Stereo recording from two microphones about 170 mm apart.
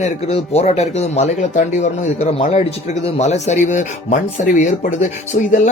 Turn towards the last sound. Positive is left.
turn(degrees=50)  # may be behind; listen again after turning